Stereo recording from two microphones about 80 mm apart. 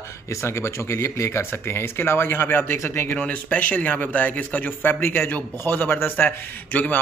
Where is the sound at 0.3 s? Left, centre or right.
Left.